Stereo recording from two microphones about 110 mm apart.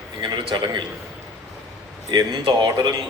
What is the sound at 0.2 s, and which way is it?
Speech, 40° right (ahead or behind).